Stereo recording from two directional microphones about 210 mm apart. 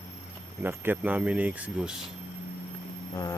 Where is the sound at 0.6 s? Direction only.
10° right (ahead or behind).